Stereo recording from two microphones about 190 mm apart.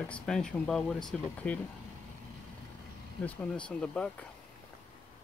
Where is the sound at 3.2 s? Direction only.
5° left (ahead or behind).